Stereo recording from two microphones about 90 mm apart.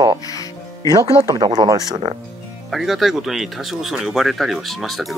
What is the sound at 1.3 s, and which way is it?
Speech, 45° right (ahead or behind).